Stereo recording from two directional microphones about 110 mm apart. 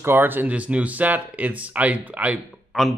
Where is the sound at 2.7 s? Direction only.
Centre (ahead or behind).